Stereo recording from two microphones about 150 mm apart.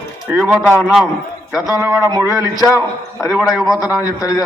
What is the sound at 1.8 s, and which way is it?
Speech, 25° right (ahead or behind).